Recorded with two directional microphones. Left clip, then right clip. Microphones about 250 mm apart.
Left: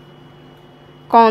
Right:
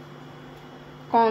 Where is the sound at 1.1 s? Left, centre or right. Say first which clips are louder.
Left 9 dB; left.